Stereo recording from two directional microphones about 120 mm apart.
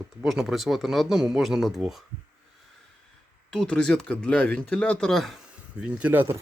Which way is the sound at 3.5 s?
5° left (ahead or behind).